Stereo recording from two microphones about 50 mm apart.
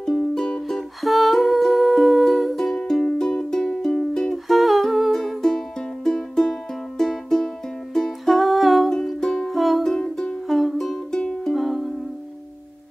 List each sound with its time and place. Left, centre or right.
0.0 s music: centre
4.5 s humming: centre
5.2 s music: centre
8.4 s music: centre
9.2 s music: centre
9.5 s music: centre
9.8 s music: centre
10.5 s music: centre
10.8 s music: centre
11.5 s music: centre